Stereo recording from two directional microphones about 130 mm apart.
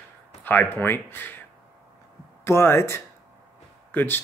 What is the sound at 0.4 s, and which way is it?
Speech, 15° left (ahead or behind).